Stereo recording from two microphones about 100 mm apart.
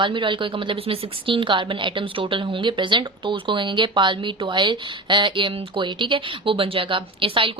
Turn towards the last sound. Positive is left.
turn(degrees=-60)  # may be behind; listen again after turning